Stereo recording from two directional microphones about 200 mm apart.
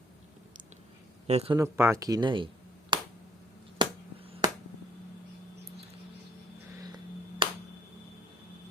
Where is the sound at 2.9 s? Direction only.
20° right (ahead or behind).